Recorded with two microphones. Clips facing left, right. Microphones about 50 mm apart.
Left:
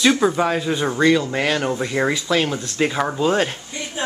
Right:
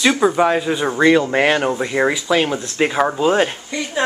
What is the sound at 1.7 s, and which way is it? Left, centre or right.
Speech, centre.